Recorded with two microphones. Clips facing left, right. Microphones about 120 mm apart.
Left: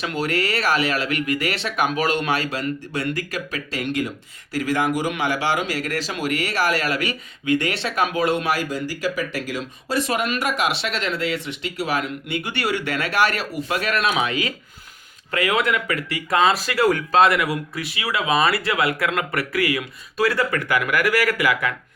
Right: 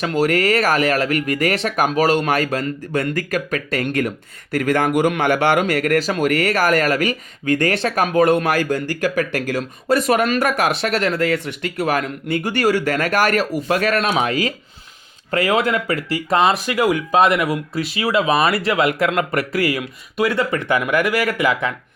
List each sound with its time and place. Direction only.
0.0 s speech: 45° right (ahead or behind); by 21.7 s 25° right (ahead or behind)